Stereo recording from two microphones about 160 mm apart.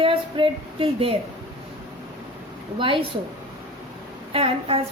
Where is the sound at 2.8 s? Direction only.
35° right (ahead or behind).